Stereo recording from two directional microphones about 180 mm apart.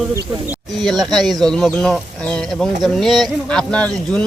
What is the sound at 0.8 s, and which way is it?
Speech, centre (ahead or behind).